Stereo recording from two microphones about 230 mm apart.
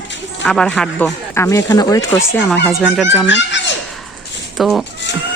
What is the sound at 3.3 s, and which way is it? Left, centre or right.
Dog, left.